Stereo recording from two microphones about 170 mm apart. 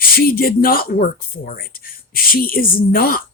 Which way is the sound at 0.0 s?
60° left (ahead or behind).